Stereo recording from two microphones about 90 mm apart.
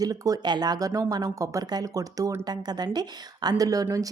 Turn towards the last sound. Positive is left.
turn(degrees=-40)  # may be behind; listen again after turning